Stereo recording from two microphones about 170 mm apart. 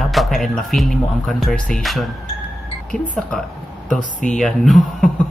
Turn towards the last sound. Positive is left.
turn(degrees=0)  # may be behind; listen again after turning